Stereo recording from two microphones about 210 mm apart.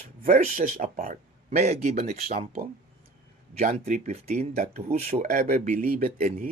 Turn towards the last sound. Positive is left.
turn(degrees=-40)  # may be behind; listen again after turning